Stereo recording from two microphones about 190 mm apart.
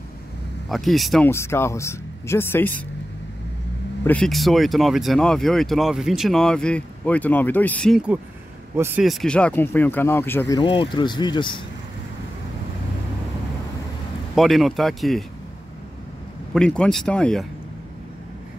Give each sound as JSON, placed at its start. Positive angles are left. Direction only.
{"t": 0.7, "sound": "speech", "side_deg": 0}
{"t": 1.3, "sound": "speech", "side_deg": 15}
{"t": 4.0, "sound": "speech", "side_deg": 5}
{"t": 8.7, "sound": "speech", "side_deg": -10}
{"t": 9.0, "sound": "speech", "side_deg": 0}
{"t": 14.3, "sound": "speech", "side_deg": 0}
{"t": 16.5, "sound": "speech", "side_deg": 5}